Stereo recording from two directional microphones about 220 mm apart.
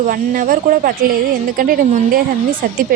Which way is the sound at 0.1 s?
40° right (ahead or behind).